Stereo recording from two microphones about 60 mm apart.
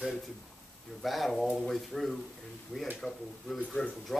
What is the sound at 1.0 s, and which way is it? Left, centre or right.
Speech, centre.